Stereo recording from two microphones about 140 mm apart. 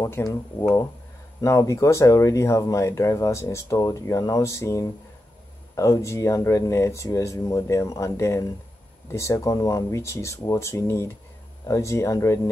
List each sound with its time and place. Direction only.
0.0 s speech: 20° left (ahead or behind)